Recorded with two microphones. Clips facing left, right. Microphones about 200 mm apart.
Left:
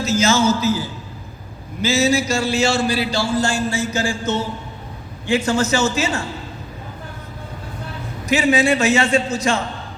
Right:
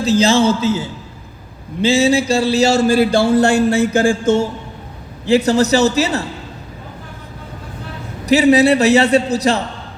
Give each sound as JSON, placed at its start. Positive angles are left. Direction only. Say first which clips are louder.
{"t": 0.0, "sound": "a man's voice", "louder": "right 4 dB", "side_deg": -30}
{"t": 5.2, "sound": "a man's voice", "louder": "right 5 dB", "side_deg": -35}
{"t": 8.3, "sound": "a man's voice", "louder": "right 6 dB", "side_deg": -35}